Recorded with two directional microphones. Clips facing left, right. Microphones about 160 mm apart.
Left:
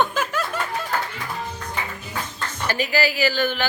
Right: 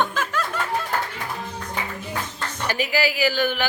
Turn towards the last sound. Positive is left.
turn(degrees=-10)  # may be behind; listen again after turning